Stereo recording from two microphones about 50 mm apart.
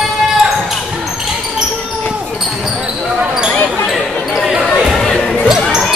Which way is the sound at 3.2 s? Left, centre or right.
Centre.